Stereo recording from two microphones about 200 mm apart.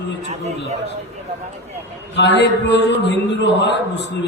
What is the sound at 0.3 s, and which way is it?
Speech, 30° right (ahead or behind).